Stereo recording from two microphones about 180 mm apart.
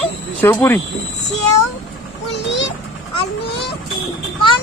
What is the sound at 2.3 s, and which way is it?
Vehicle, 80° left.